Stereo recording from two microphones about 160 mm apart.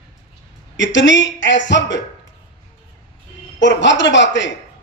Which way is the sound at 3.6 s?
90° left.